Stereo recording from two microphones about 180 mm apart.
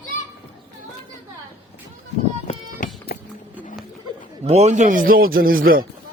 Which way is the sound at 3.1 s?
60° left (ahead or behind).